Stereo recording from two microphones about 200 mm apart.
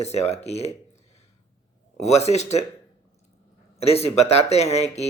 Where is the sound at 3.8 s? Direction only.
30° left (ahead or behind).